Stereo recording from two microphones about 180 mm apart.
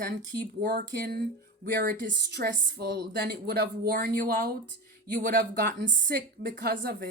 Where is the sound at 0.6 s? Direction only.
50° right (ahead or behind).